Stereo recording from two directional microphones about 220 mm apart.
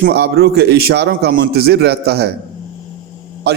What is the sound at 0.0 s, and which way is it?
A man's voice, 45° right (ahead or behind).